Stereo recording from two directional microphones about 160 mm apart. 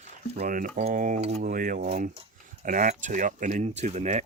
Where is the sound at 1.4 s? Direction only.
60° right (ahead or behind).